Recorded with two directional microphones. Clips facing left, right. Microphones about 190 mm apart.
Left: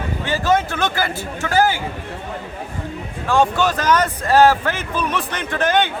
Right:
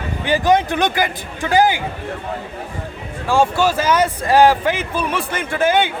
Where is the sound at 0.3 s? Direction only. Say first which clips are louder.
Right 4 dB; 15° right (ahead or behind).